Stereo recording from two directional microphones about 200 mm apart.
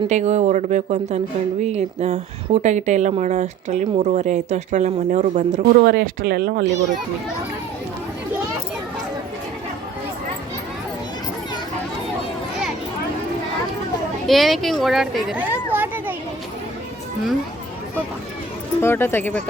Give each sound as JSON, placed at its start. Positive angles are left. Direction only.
{"t": 0.1, "sound": "speech", "side_deg": -35}
{"t": 5.9, "sound": "speech", "side_deg": -50}
{"t": 14.3, "sound": "speech", "side_deg": 0}
{"t": 18.8, "sound": "speech", "side_deg": 10}